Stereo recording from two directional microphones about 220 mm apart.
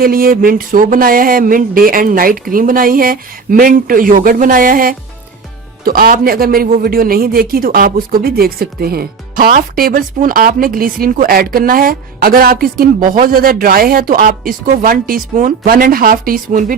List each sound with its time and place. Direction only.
0.0 s a man's voice: 40° right (ahead or behind)